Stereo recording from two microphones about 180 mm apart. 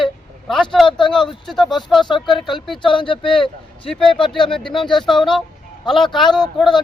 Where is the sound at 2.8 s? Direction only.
30° left (ahead or behind).